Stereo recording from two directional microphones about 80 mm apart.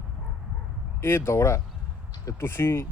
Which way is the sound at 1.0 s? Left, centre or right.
Left.